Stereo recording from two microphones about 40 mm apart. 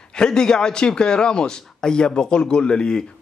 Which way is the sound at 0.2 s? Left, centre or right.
Centre.